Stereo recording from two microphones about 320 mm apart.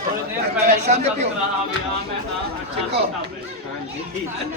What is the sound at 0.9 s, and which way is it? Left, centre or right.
Speech, right.